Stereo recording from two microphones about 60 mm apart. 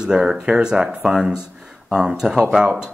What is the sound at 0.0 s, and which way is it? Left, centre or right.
Speech, centre.